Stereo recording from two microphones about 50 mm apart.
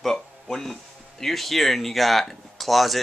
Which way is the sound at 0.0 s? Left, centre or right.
Centre.